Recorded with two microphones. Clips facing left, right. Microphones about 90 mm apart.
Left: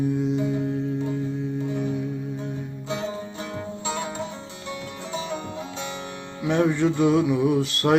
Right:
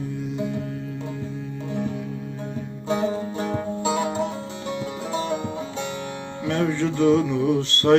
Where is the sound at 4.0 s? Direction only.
60° right (ahead or behind).